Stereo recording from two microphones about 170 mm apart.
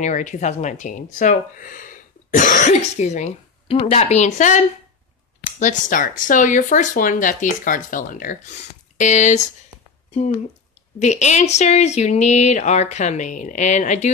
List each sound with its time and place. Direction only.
0.0 s speech: 45° left (ahead or behind)
11.0 s speech: 45° left (ahead or behind)